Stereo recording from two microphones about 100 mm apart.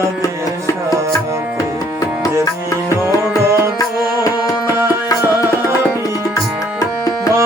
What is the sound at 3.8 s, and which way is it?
Music, 40° left (ahead or behind).